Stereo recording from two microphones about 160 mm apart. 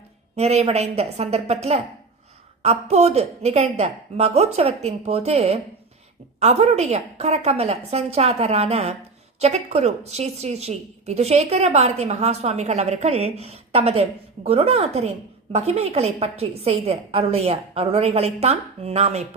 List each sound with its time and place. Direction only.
0.3 s a woman's voice: 40° right (ahead or behind)